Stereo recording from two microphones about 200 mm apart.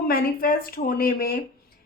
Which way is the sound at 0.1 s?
45° left (ahead or behind).